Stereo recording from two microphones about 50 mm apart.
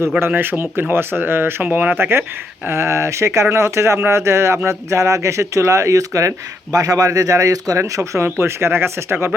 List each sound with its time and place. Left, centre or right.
0.3 s speech: right
1.6 s speech: right
2.0 s speech: right
2.6 s speech: right